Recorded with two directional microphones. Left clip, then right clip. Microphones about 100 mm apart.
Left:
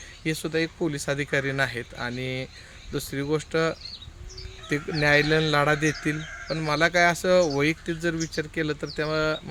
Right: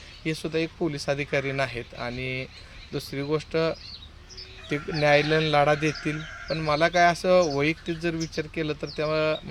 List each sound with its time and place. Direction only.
0.3 s speech: 35° left (ahead or behind)
4.9 s speech: 35° left (ahead or behind)